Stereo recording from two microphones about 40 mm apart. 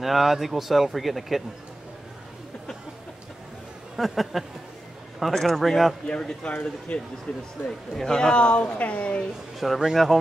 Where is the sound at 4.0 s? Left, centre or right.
Centre.